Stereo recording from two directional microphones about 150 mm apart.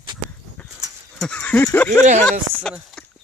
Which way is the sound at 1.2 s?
10° left (ahead or behind).